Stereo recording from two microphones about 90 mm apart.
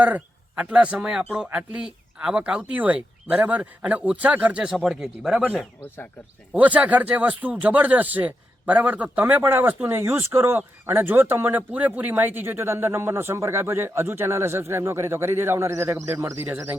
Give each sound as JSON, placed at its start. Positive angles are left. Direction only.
{"t": 0.0, "sound": "speech", "side_deg": -15}